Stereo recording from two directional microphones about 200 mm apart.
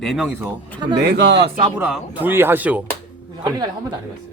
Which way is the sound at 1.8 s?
5° right (ahead or behind).